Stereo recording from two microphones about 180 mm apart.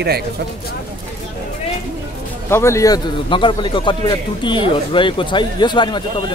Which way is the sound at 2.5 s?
15° left (ahead or behind).